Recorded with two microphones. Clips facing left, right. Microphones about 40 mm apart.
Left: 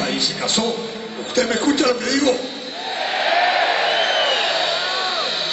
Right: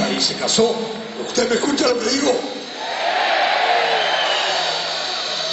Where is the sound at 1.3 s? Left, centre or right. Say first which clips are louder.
Even; left.